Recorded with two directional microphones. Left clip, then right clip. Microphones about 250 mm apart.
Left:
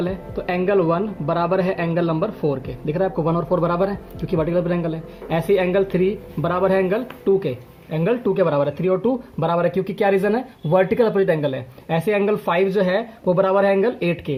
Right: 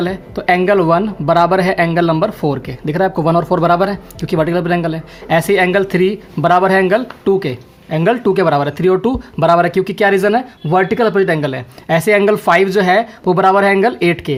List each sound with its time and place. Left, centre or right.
0.0 s speech: right